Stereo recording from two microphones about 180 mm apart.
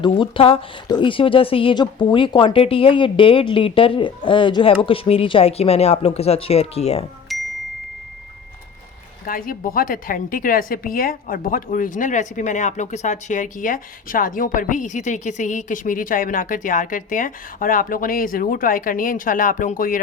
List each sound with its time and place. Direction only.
0.0 s speech: 30° left (ahead or behind)
7.3 s ding: centre (ahead or behind)
9.2 s a woman's voice: 50° left (ahead or behind)